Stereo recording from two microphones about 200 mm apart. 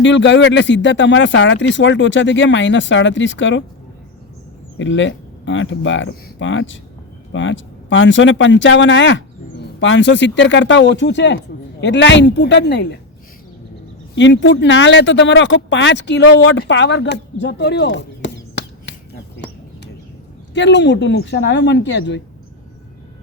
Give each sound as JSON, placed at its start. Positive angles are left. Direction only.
{"t": 0.0, "sound": "speech", "side_deg": 65}
{"t": 4.8, "sound": "speech", "side_deg": 70}
{"t": 14.2, "sound": "speech", "side_deg": 65}
{"t": 20.5, "sound": "speech", "side_deg": 60}